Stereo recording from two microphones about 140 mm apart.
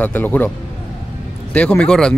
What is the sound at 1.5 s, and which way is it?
Speech, 10° left (ahead or behind).